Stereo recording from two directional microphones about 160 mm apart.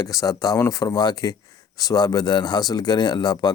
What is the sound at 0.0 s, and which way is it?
Speech, 20° left (ahead or behind).